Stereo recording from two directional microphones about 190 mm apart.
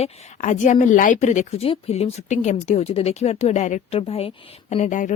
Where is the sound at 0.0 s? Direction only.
40° left (ahead or behind).